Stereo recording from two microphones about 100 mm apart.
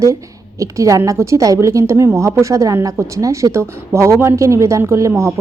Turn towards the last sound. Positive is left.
turn(degrees=-30)  # may be behind; listen again after turning